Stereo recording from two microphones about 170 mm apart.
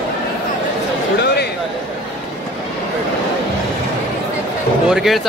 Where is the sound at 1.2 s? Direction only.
75° left (ahead or behind).